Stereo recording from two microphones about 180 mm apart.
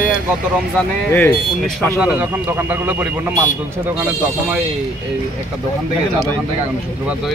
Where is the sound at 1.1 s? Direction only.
10° left (ahead or behind).